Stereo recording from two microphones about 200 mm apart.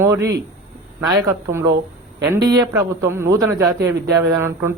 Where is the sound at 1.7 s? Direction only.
55° right (ahead or behind).